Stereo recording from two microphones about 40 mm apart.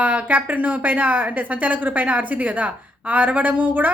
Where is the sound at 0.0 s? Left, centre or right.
Right.